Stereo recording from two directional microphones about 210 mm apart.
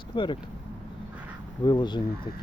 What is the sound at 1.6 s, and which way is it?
Speech, 20° left (ahead or behind).